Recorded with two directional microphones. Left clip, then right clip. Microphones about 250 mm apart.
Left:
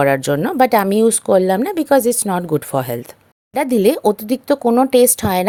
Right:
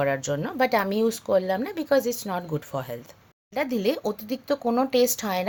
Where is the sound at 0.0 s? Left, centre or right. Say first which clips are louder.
Left 10 dB; left.